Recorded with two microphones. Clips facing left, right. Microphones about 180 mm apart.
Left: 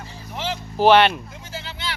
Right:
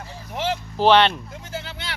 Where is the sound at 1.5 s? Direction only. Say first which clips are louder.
Even; 50° right (ahead or behind).